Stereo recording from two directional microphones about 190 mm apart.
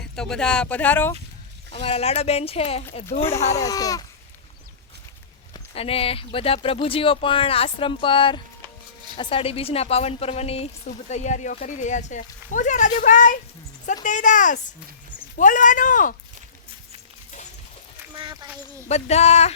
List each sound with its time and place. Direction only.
0.0 s speech: 5° left (ahead or behind)
1.7 s speech: 30° left (ahead or behind)
3.2 s speech: 15° left (ahead or behind)
5.5 s speech: 30° left (ahead or behind)
18.1 s a sound: 25° right (ahead or behind)
18.9 s speech: 35° left (ahead or behind)